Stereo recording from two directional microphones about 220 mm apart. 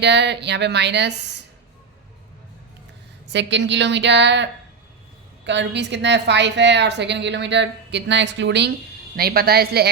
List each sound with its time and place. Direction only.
0.0 s a woman's voice: 50° right (ahead or behind)
3.2 s a woman's voice: 55° right (ahead or behind)
5.5 s a woman's voice: 50° right (ahead or behind)